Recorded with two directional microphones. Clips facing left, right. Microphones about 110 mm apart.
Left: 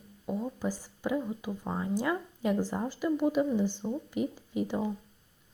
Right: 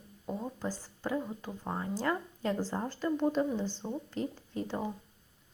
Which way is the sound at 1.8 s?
10° left (ahead or behind).